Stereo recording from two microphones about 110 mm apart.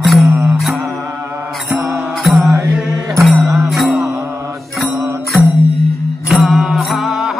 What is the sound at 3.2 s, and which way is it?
Music, centre (ahead or behind).